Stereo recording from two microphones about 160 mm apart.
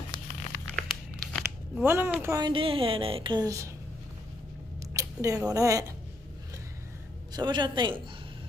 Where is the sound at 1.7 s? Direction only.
15° right (ahead or behind).